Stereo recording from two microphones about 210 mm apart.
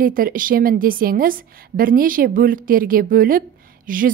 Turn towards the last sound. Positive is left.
turn(degrees=-40)  # may be behind; listen again after turning